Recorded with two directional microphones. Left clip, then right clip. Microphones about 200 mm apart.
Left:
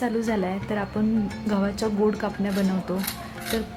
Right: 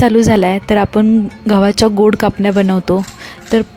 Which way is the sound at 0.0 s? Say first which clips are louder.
Right 15 dB; 50° right (ahead or behind).